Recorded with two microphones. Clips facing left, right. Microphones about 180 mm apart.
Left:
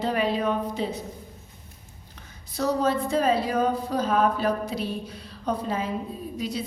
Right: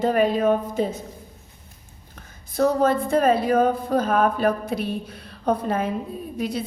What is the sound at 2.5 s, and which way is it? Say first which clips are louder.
A woman's voice: right 5 dB; 55° right (ahead or behind).